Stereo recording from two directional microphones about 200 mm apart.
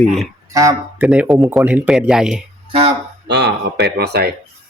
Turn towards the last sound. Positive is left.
turn(degrees=-55)  # may be behind; listen again after turning